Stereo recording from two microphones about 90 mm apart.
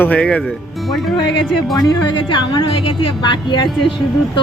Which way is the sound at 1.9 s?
60° left (ahead or behind).